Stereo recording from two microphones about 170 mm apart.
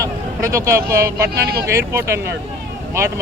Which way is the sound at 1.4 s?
65° right (ahead or behind).